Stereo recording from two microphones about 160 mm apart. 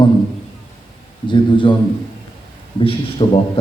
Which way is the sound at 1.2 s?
30° left (ahead or behind).